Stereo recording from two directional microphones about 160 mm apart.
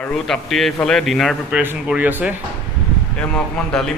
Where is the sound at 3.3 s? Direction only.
5° left (ahead or behind).